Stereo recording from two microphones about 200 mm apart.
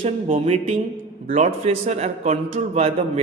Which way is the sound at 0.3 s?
30° right (ahead or behind).